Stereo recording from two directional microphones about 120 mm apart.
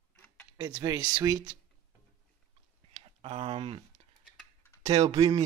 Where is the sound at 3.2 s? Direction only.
55° right (ahead or behind).